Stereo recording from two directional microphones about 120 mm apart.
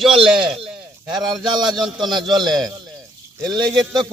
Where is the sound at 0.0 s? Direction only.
5° right (ahead or behind).